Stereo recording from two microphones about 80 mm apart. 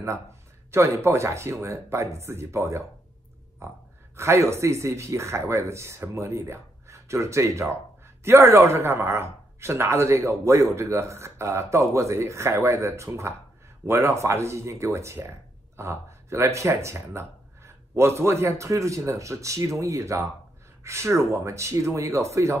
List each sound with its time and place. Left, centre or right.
0.7 s speech: right